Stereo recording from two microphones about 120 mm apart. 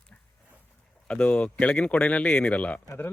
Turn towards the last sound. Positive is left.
turn(degrees=15)  # may be behind; listen again after turning